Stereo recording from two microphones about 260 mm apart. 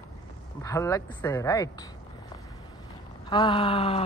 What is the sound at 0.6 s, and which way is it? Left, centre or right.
Speech, centre.